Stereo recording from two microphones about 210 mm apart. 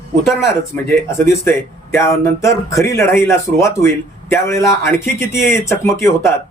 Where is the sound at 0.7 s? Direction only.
10° left (ahead or behind).